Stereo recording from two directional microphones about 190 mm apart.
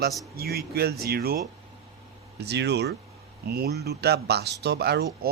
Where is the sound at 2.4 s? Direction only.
60° right (ahead or behind).